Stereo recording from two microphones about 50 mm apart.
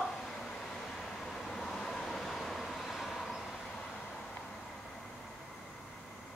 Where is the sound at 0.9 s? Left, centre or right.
Centre.